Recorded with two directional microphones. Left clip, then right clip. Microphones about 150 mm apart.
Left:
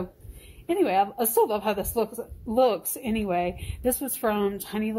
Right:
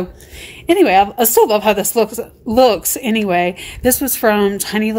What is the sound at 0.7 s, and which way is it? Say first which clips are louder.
A woman's voice: right 12 dB; 35° right (ahead or behind).